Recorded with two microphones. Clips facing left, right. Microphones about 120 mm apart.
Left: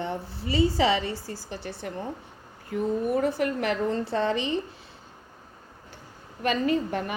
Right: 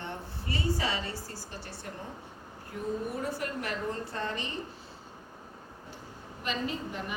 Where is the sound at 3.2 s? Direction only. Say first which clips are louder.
Left 9 dB; 85° left.